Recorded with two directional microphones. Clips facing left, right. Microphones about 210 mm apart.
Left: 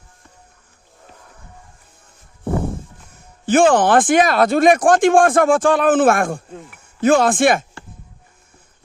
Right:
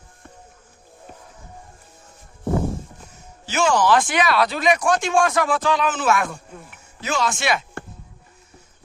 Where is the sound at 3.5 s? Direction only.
55° left (ahead or behind).